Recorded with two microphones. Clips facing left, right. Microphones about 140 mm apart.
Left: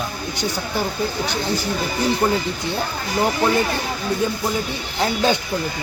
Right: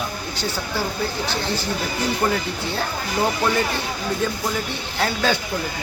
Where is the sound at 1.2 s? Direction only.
15° left (ahead or behind).